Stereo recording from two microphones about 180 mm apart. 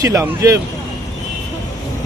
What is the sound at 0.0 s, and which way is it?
Speech, 15° right (ahead or behind).